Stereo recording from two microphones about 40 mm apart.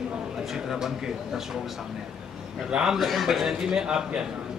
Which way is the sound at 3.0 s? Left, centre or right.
Centre.